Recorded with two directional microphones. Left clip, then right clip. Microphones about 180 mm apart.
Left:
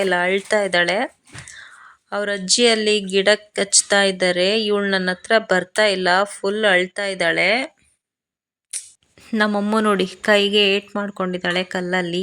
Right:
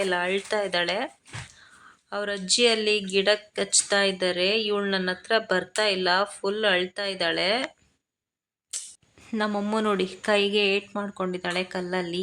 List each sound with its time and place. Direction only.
0.0 s speech: 35° left (ahead or behind)
8.7 s speech: 25° left (ahead or behind)